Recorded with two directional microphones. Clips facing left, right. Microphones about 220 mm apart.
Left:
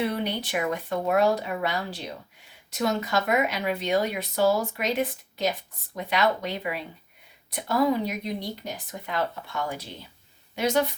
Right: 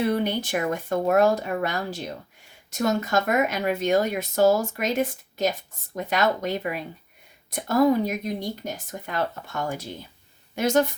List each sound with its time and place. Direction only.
0.0 s speech: 45° right (ahead or behind)